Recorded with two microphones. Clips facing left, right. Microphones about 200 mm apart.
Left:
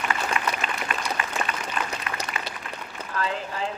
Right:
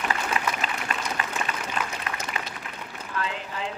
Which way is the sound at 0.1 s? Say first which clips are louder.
Left 1 dB; 35° right (ahead or behind).